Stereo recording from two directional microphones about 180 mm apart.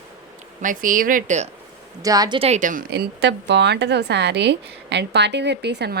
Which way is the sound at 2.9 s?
70° right (ahead or behind).